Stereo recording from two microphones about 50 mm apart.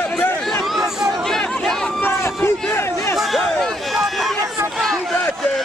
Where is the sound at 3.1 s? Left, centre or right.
Centre.